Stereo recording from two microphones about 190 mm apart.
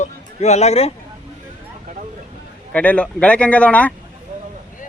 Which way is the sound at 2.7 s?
5° left (ahead or behind).